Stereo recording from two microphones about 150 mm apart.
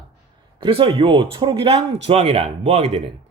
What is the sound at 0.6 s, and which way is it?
A man's voice, 35° right (ahead or behind).